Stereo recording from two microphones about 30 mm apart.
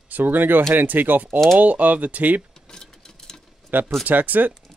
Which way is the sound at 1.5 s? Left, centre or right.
Right.